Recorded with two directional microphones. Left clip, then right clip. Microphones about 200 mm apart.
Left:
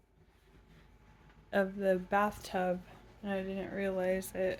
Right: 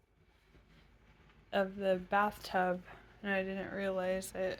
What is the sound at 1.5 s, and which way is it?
A woman's voice, 20° left (ahead or behind).